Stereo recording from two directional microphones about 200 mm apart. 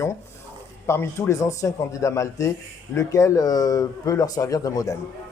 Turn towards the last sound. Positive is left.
turn(degrees=15)  # may be behind; listen again after turning